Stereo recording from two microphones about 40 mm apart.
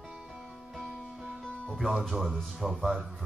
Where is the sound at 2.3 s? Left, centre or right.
Centre.